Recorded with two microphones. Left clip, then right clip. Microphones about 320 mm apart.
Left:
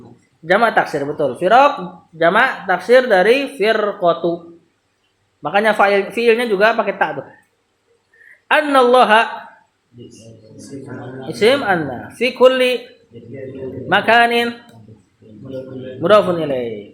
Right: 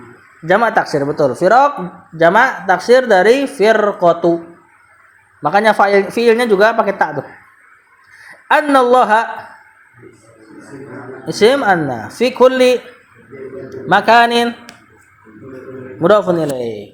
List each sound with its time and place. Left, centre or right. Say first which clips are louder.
0.4 s speech: right 1 dB; right
5.4 s speech: right 3 dB; right
8.4 s speech: right 2 dB; right
11.3 s speech: right 3 dB; right
13.8 s speech: right 3 dB; right
16.0 s speech: right 1 dB; right